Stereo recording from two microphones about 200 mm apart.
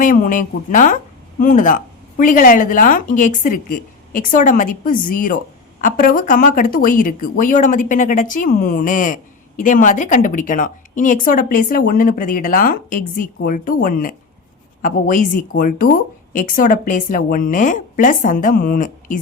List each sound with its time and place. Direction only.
0.0 s speech: 40° left (ahead or behind)